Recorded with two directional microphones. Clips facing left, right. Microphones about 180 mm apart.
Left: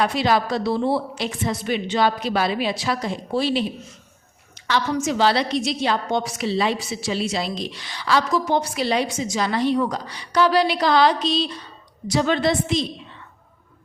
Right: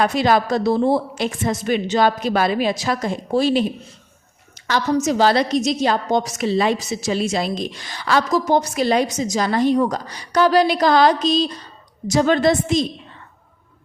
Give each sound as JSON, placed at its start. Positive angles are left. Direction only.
{"t": 0.0, "sound": "a woman's voice", "side_deg": -50}